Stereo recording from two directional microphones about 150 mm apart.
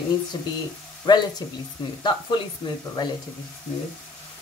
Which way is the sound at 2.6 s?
35° left (ahead or behind).